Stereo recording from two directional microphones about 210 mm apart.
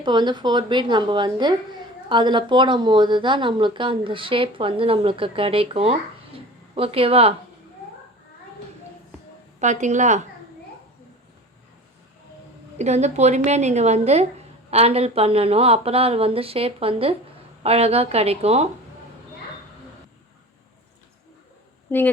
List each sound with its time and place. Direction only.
0.0 s speech: 20° right (ahead or behind)
9.6 s a woman's voice: 35° right (ahead or behind)
12.8 s a woman's voice: 35° right (ahead or behind)
21.8 s a woman's voice: 10° left (ahead or behind)